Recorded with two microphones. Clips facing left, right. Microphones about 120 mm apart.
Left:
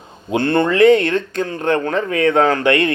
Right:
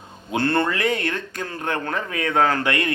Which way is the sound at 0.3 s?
20° left (ahead or behind).